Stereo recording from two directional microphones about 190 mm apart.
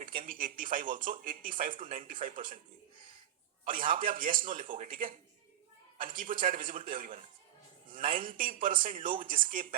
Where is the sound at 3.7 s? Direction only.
45° right (ahead or behind).